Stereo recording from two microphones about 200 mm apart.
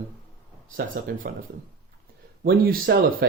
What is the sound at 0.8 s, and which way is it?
Speech, 45° right (ahead or behind).